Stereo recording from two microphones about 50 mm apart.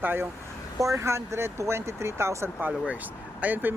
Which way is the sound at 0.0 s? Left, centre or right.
Right.